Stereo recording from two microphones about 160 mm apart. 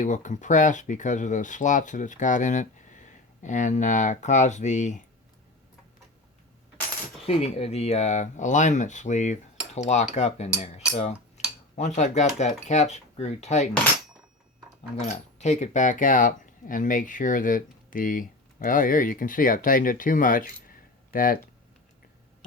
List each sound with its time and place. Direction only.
0.0 s speech: 50° left (ahead or behind)
7.3 s speech: 40° left (ahead or behind)
10.6 s cutlery: 40° left (ahead or behind)
11.8 s speech: 45° left (ahead or behind)
15.0 s speech: 45° left (ahead or behind)